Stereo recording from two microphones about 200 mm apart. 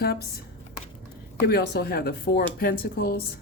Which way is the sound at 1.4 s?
50° left (ahead or behind).